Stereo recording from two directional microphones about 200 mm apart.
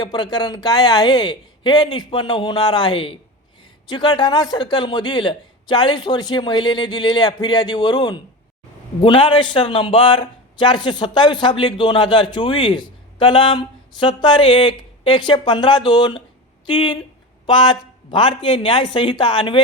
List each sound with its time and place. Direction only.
0.0 s a man's voice: 20° left (ahead or behind)